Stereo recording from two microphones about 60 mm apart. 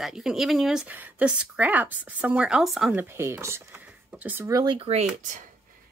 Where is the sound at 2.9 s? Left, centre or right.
Right.